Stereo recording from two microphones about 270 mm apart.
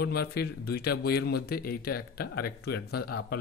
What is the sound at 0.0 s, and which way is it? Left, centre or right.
Speech, left.